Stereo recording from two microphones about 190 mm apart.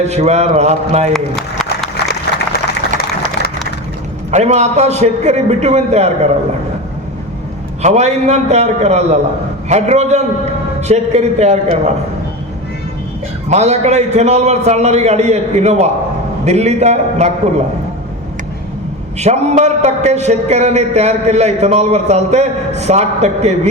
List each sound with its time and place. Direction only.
0.0 s a man's voice: 35° right (ahead or behind)
1.1 s a man's voice: centre (ahead or behind)
4.3 s a man's voice: 35° right (ahead or behind)
7.8 s a man's voice: 35° right (ahead or behind)
13.5 s a man's voice: 35° right (ahead or behind)
19.2 s a man's voice: 35° right (ahead or behind)